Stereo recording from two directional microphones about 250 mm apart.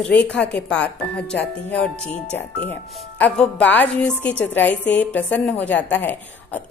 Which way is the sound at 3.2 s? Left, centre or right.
Centre.